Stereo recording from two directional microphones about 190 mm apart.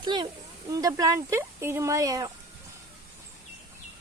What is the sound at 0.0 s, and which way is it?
Speech, 25° right (ahead or behind).